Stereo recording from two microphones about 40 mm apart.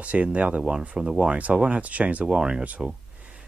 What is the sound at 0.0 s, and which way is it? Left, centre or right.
Speech, right.